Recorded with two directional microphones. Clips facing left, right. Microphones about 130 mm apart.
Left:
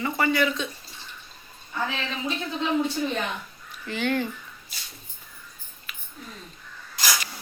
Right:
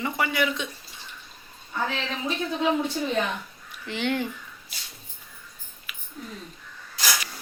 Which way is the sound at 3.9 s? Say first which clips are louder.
Left 1 dB; 20° right (ahead or behind).